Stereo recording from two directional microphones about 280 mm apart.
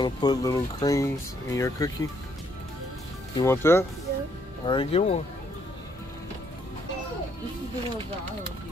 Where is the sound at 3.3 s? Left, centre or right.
Centre.